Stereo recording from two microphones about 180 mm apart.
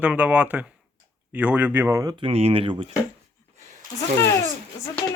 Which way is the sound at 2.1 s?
30° right (ahead or behind).